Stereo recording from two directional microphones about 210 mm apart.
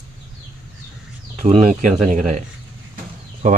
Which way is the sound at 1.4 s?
35° right (ahead or behind).